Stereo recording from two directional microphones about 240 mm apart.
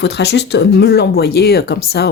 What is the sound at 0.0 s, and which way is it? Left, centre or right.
Speech, left.